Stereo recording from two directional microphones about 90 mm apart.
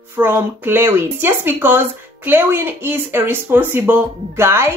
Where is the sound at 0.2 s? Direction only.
25° right (ahead or behind).